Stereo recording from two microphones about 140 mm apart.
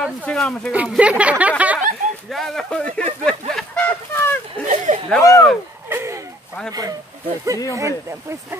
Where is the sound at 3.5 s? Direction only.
10° left (ahead or behind).